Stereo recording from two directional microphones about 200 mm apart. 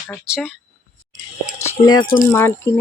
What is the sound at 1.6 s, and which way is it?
Speech, 20° left (ahead or behind).